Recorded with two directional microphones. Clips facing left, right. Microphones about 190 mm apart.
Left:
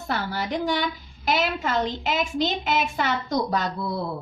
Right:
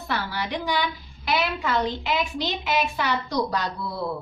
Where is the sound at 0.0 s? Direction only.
45° left (ahead or behind).